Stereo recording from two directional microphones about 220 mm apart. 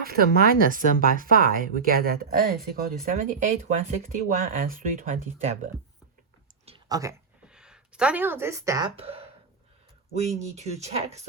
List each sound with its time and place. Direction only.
0.0 s speech: 45° right (ahead or behind)
6.7 s a sound: 20° right (ahead or behind)
7.4 s speech: 5° right (ahead or behind); by 9.2 s 25° right (ahead or behind)
10.2 s speech: 30° right (ahead or behind)